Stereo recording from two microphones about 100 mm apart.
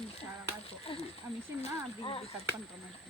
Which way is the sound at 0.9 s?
65° left (ahead or behind).